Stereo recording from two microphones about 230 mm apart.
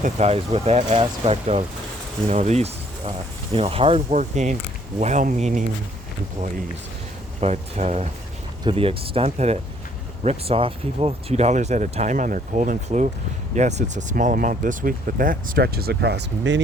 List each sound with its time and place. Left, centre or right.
0.0 s speech: right
7.4 s speech: right